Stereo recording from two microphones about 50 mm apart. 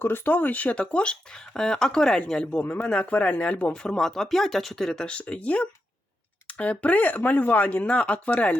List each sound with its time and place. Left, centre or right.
0.0 s speech: left
3.8 s speech: centre; by 8.5 s left